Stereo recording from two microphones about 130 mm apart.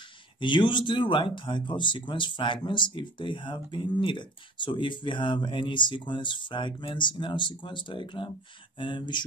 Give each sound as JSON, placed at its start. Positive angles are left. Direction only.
{"t": 0.4, "sound": "speech", "side_deg": 35}